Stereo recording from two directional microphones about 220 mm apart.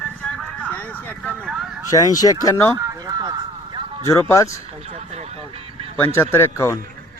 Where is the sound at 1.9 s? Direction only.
15° left (ahead or behind).